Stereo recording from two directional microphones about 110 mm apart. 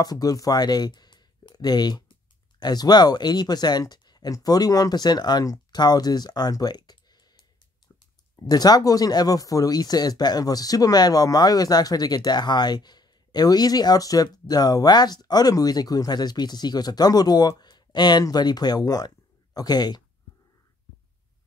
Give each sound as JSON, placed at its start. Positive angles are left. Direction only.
{"t": 0.0, "sound": "speech", "side_deg": 35}